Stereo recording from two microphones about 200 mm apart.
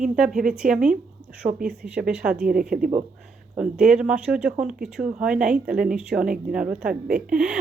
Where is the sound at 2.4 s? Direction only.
45° right (ahead or behind).